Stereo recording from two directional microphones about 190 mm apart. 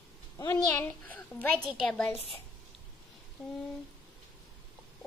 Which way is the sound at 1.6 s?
5° left (ahead or behind).